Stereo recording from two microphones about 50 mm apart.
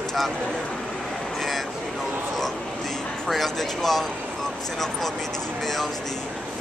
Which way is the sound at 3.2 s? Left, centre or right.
Centre.